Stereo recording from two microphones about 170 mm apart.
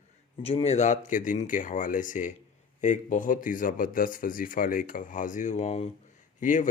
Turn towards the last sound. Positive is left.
turn(degrees=50)  # may be behind; listen again after turning